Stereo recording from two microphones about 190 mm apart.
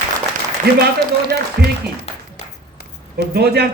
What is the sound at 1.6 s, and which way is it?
Speech, 55° right (ahead or behind).